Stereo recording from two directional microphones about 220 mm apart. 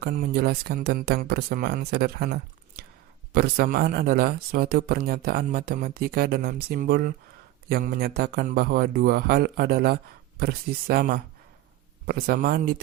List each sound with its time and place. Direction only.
0.0 s speech: 40° right (ahead or behind)